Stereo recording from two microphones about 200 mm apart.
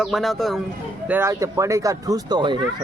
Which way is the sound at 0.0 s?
Centre (ahead or behind).